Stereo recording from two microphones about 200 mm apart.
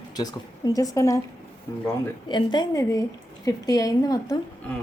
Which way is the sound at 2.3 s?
25° left (ahead or behind).